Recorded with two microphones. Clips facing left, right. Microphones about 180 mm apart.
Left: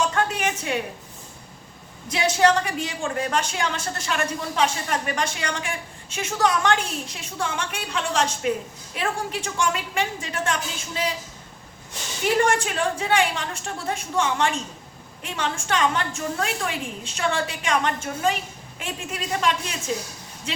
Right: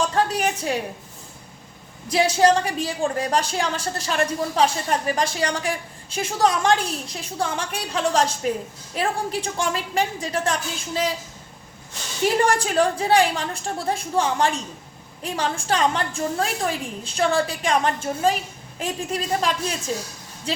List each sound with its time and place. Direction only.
0.1 s a woman's voice: 35° right (ahead or behind)
2.0 s a woman's voice: 30° right (ahead or behind)
12.5 s a woman's voice: 35° right (ahead or behind)